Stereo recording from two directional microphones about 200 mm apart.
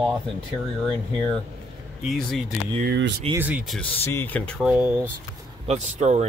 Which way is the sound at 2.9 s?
60° right (ahead or behind).